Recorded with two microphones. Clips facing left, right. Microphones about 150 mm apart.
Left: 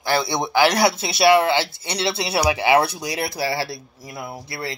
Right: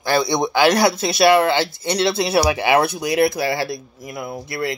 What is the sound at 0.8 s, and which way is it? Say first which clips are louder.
Speech: right 2 dB; 25° left (ahead or behind).